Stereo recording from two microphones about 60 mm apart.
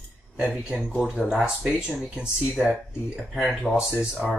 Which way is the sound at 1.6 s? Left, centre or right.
Centre.